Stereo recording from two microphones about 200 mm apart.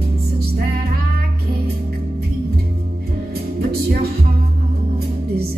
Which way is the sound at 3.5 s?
50° right (ahead or behind).